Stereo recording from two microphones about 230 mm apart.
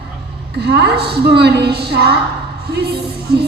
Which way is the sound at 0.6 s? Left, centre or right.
Right.